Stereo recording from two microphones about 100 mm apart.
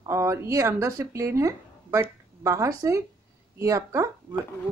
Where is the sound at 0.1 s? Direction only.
30° right (ahead or behind).